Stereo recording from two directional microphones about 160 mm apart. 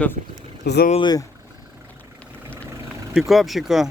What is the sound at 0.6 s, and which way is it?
Speech, 90° left.